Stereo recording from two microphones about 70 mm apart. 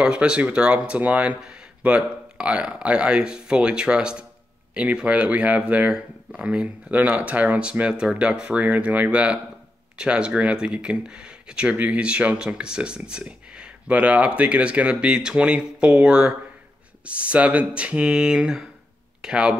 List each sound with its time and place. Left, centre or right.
0.0 s speech: centre